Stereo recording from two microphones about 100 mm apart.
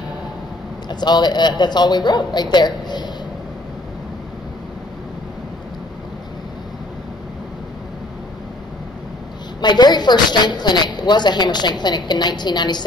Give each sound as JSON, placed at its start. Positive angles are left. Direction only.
{"t": 0.8, "sound": "a woman's voice", "side_deg": 45}
{"t": 9.6, "sound": "a woman's voice", "side_deg": 45}